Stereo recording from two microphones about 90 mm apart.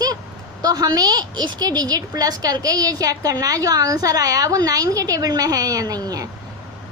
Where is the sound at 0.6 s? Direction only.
45° right (ahead or behind).